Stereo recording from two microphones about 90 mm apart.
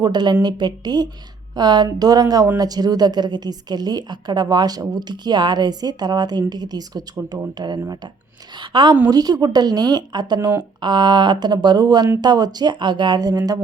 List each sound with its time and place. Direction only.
0.0 s a woman's voice: 55° right (ahead or behind)
9.0 s a woman's voice: 50° right (ahead or behind)